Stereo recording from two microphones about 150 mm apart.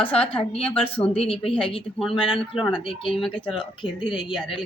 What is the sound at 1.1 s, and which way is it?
Speech, 40° left (ahead or behind).